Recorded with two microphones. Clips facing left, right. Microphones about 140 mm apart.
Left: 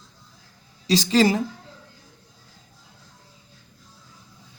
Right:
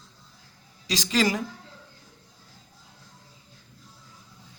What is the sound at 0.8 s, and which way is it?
Speech, 30° left (ahead or behind).